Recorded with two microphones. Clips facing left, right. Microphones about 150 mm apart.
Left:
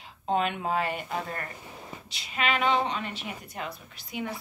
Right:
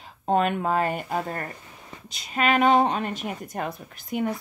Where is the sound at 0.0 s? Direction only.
45° right (ahead or behind).